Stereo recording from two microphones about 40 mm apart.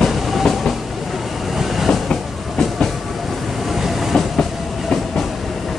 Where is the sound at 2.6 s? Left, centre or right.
Centre.